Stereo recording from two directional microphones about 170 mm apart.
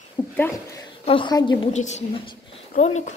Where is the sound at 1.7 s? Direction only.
40° left (ahead or behind).